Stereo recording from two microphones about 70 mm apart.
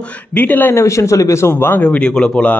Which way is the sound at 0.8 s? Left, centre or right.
Left.